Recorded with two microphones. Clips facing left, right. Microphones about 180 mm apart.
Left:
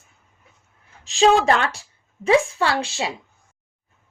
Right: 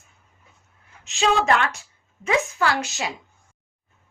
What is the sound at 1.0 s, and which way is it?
A woman's voice, 35° left (ahead or behind).